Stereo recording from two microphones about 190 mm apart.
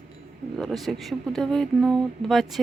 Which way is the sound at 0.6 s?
Centre (ahead or behind).